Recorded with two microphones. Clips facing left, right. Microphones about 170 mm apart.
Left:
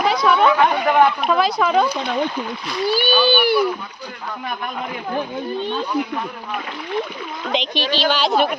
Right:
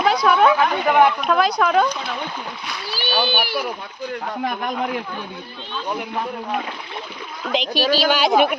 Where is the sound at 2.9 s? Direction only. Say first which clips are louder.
Left 4 dB; 60° left (ahead or behind).